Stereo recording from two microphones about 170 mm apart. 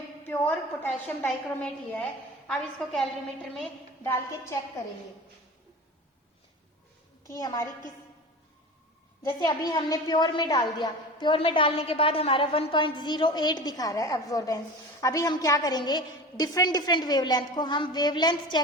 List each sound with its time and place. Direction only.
0.3 s a woman's voice: 10° left (ahead or behind)
4.0 s a woman's voice: 15° left (ahead or behind)
7.3 s a woman's voice: 20° left (ahead or behind)
9.2 s a woman's voice: 25° left (ahead or behind)